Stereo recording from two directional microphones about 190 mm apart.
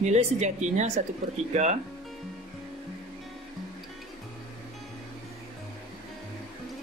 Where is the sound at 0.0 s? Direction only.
35° right (ahead or behind).